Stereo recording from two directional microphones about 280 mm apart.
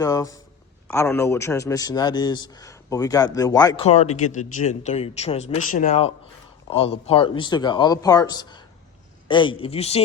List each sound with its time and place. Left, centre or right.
0.0 s a man's voice: centre